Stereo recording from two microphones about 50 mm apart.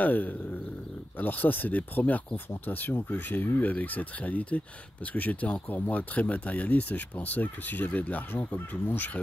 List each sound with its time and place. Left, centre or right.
0.0 s speech: left